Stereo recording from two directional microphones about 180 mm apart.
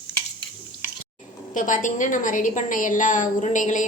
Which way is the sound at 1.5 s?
45° left (ahead or behind).